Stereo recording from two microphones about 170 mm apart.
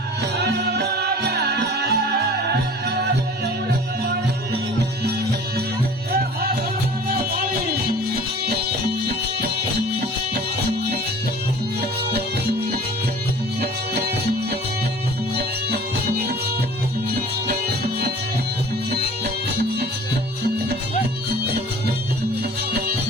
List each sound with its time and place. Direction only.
0.2 s music: 70° right (ahead or behind)
13.6 s music: 70° right (ahead or behind)
15.4 s music: 65° right (ahead or behind)
21.2 s music: 70° right (ahead or behind)